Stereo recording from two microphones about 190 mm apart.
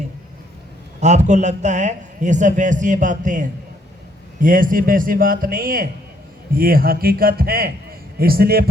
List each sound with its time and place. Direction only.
1.0 s a man's voice: 35° right (ahead or behind); by 8.7 s 55° right (ahead or behind)